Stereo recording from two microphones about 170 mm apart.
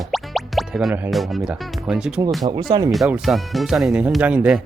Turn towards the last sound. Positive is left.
turn(degrees=-10)  # may be behind; listen again after turning